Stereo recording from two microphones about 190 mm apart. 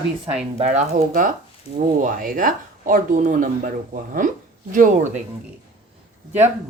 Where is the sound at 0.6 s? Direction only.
35° right (ahead or behind).